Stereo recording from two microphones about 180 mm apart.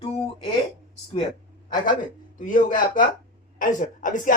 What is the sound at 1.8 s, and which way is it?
Speech, 45° left (ahead or behind).